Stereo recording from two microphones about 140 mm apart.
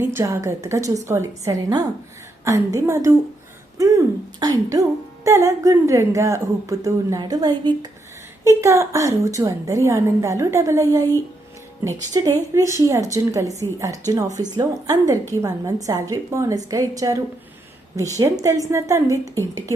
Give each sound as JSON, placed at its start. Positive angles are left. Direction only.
{"t": 0.0, "sound": "speech", "side_deg": -15}
{"t": 8.4, "sound": "speech", "side_deg": -20}